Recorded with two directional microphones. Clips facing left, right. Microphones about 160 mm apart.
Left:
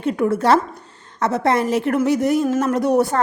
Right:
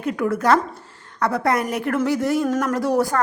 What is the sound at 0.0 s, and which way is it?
Speech, 25° left (ahead or behind).